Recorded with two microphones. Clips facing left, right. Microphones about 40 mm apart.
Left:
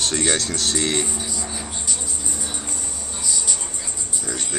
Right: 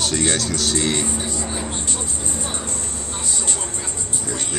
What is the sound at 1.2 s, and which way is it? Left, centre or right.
Music, right.